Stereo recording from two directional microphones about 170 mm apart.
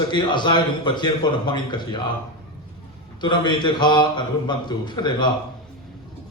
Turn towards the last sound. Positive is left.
turn(degrees=25)  # may be behind; listen again after turning